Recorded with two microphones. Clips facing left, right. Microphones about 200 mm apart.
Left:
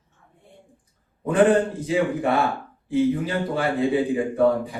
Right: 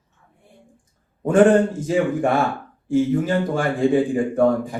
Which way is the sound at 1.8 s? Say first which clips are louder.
Right 3 dB; 45° right (ahead or behind).